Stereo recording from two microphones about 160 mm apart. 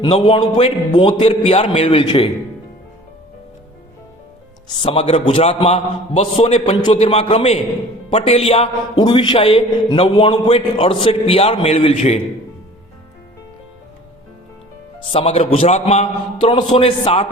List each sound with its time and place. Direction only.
0.0 s a man's voice: 30° left (ahead or behind)
4.8 s a man's voice: 35° left (ahead or behind)
14.9 s a man's voice: 35° left (ahead or behind)